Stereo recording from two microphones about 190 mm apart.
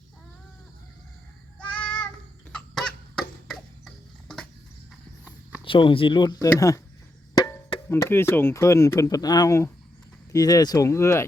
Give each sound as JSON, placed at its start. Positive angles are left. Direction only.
{"t": 1.5, "sound": "child singing", "side_deg": 5}
{"t": 2.5, "sound": "chicken", "side_deg": 5}
{"t": 5.6, "sound": "speech", "side_deg": 25}